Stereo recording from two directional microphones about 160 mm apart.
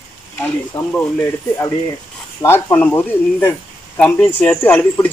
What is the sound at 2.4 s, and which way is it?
A man's voice, 15° left (ahead or behind).